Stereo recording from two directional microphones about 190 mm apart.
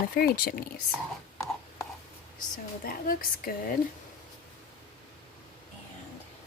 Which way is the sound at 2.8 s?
50° left (ahead or behind).